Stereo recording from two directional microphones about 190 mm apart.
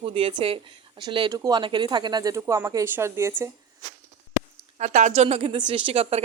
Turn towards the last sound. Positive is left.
turn(degrees=-30)  # may be behind; listen again after turning